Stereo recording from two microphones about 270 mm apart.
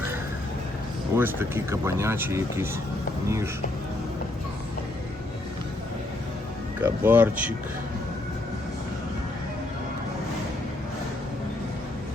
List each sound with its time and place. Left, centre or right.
1.1 s speech: centre
6.8 s speech: centre